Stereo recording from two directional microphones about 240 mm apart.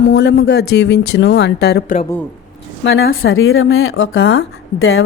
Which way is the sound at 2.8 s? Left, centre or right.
Left.